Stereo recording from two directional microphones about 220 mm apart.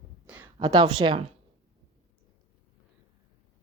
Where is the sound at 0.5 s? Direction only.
20° right (ahead or behind).